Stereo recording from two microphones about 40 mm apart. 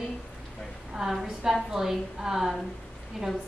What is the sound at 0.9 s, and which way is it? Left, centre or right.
A woman's voice, centre.